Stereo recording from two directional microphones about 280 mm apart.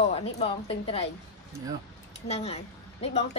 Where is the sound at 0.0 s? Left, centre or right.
Left.